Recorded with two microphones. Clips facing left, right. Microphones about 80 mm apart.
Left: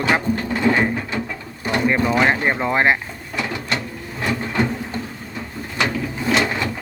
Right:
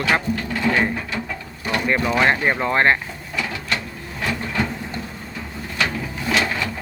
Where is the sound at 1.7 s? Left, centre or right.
Left.